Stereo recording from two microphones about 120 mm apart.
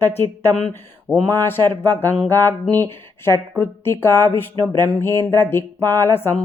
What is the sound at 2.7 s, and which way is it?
Speech, 20° left (ahead or behind).